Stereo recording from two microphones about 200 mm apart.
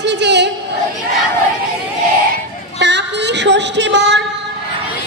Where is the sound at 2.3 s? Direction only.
60° right (ahead or behind).